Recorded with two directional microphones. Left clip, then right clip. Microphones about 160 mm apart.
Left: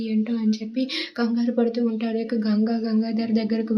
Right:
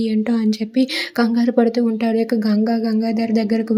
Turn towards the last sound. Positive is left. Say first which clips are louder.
# right 5 dB
turn(degrees=-30)  # may be behind; listen again after turning